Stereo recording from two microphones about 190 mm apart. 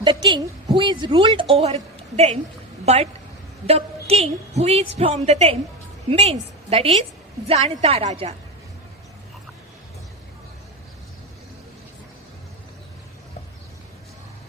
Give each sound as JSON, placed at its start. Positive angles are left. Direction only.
{"t": 0.0, "sound": "a woman's voice", "side_deg": -25}